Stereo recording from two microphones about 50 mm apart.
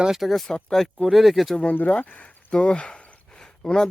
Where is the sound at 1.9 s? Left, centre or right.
Left.